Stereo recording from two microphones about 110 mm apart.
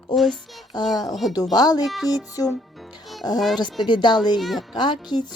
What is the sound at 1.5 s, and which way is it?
Speech, 35° left (ahead or behind).